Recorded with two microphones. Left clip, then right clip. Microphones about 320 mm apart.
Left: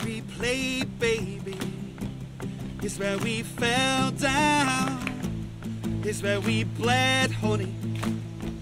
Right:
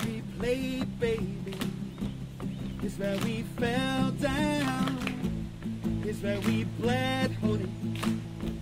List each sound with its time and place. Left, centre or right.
0.4 s music: left
3.0 s music: left
6.0 s music: left